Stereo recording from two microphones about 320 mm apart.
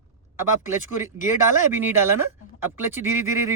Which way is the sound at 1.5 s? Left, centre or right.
Centre.